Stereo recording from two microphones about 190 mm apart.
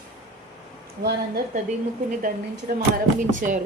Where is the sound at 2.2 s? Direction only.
50° right (ahead or behind).